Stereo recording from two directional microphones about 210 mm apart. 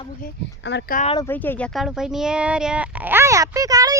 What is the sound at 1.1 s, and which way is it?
Speech, 10° left (ahead or behind).